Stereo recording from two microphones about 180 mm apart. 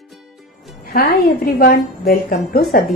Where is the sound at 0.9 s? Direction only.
60° left (ahead or behind).